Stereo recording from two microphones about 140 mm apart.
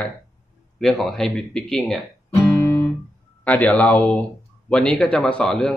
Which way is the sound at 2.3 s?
20° left (ahead or behind).